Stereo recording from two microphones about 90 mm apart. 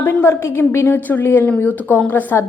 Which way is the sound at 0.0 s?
25° left (ahead or behind).